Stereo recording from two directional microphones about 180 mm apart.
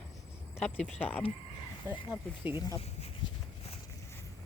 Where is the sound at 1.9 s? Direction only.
10° right (ahead or behind).